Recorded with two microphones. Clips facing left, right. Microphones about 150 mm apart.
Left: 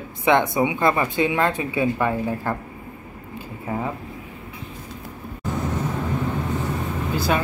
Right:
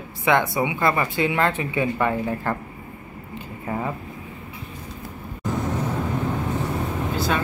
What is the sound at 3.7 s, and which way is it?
Speech, 10° left (ahead or behind).